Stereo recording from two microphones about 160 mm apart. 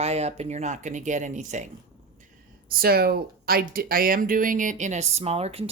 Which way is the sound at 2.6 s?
75° right (ahead or behind).